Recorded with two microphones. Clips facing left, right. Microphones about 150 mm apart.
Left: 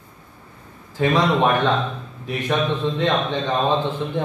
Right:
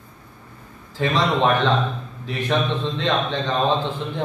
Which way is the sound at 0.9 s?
20° left (ahead or behind).